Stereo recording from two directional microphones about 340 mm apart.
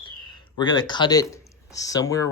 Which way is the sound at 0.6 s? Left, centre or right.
Centre.